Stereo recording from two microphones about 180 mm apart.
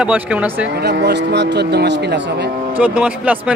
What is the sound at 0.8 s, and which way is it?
Speech, 70° right (ahead or behind).